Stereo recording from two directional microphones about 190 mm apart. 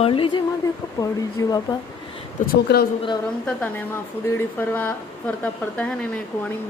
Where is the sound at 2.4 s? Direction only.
55° left (ahead or behind).